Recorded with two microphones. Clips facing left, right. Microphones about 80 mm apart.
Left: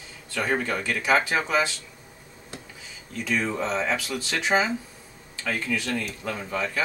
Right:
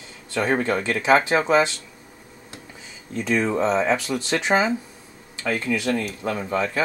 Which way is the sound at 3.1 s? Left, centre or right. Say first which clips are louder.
Right 5 dB; right.